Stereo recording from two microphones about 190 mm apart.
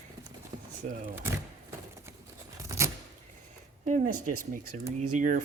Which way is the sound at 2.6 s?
15° right (ahead or behind).